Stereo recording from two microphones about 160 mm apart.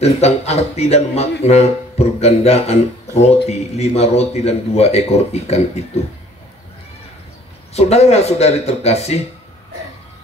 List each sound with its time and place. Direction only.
0.0 s speech: 40° left (ahead or behind)
7.7 s speech: 40° left (ahead or behind)